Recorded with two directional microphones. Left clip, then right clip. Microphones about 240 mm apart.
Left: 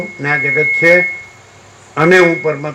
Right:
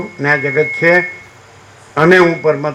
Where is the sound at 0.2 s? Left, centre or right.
Right.